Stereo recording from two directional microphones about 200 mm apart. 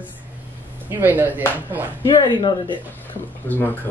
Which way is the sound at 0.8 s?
10° right (ahead or behind).